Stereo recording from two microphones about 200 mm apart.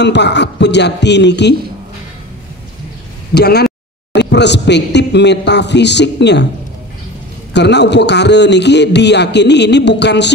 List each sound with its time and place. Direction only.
0.0 s a man's voice: 60° left (ahead or behind)
3.3 s speech: 55° left (ahead or behind)
7.5 s a man's voice: 60° left (ahead or behind)